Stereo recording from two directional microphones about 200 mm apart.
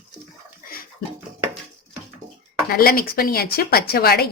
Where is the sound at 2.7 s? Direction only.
50° left (ahead or behind).